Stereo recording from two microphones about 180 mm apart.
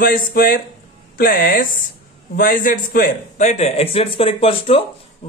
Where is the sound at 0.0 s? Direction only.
55° left (ahead or behind).